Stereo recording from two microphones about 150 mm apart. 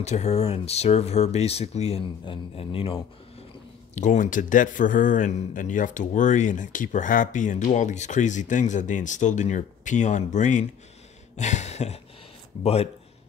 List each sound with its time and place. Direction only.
0.0 s a man's voice: 50° left (ahead or behind)
3.9 s speech: 55° left (ahead or behind)